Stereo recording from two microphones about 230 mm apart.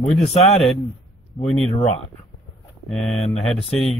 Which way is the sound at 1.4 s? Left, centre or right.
Centre.